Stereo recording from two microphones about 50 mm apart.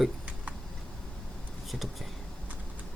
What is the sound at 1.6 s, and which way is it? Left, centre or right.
Vehicle, centre.